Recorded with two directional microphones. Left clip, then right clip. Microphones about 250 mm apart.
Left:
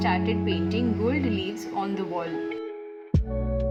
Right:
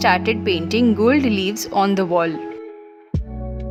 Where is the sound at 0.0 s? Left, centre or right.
Right.